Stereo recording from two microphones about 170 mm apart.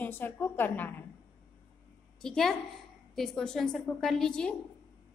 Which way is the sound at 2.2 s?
5° left (ahead or behind).